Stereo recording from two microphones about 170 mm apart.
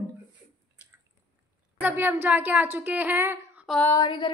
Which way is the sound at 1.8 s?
10° right (ahead or behind).